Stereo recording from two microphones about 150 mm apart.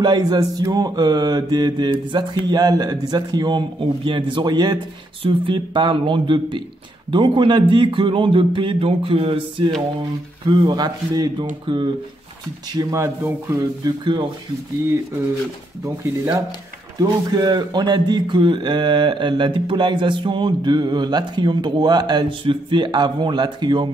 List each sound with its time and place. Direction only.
0.0 s speech: 25° right (ahead or behind)
10.7 s speech: 25° right (ahead or behind)
12.7 s speech: 20° right (ahead or behind)
15.8 s speech: 20° right (ahead or behind)